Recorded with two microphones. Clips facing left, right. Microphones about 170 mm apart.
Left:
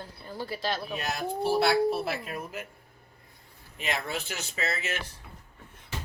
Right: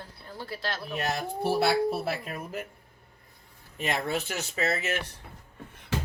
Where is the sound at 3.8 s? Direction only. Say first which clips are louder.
Right 3 dB; 45° right (ahead or behind).